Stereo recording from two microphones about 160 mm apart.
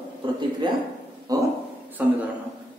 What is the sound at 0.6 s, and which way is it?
Speech, 30° right (ahead or behind).